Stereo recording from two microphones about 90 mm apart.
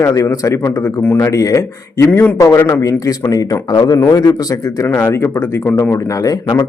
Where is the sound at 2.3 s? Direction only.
35° left (ahead or behind).